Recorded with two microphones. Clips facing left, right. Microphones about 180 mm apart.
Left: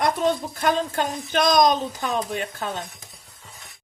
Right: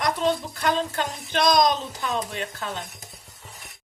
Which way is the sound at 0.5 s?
50° left (ahead or behind).